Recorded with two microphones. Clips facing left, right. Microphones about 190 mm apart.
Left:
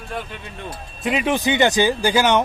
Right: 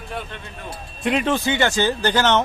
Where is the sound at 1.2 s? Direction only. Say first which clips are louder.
Left 2 dB; 15° left (ahead or behind).